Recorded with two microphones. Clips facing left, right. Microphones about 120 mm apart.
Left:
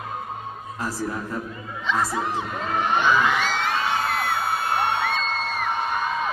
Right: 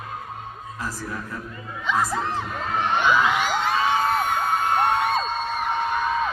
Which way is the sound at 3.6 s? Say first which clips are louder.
Right 3 dB; 45° right (ahead or behind).